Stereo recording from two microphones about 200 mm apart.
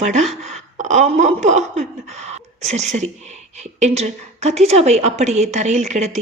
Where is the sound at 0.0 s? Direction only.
35° right (ahead or behind).